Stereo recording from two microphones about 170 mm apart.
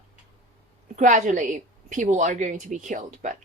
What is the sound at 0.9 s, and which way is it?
A woman's voice, 45° right (ahead or behind).